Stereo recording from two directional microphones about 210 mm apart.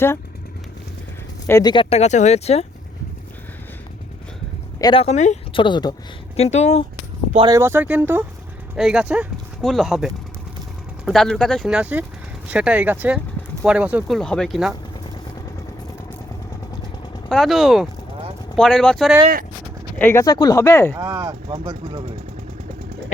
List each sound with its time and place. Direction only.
1.5 s speech: 15° left (ahead or behind)
4.8 s speech: 25° left (ahead or behind)
7.3 s speech: 20° right (ahead or behind); by 14.8 s centre (ahead or behind)
17.2 s speech: centre (ahead or behind)
21.0 s speech: 15° right (ahead or behind)